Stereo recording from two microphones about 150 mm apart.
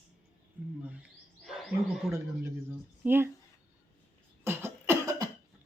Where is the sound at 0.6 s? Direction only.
10° right (ahead or behind).